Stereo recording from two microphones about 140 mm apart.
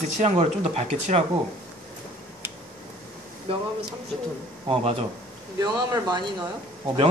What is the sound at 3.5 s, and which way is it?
Speech, 40° right (ahead or behind).